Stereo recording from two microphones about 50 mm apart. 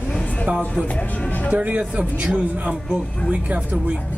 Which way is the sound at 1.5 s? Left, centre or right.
Right.